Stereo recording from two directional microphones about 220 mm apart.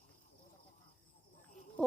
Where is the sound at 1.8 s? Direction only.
5° left (ahead or behind).